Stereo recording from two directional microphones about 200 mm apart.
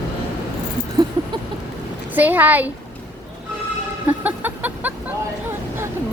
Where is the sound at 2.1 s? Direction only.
10° right (ahead or behind).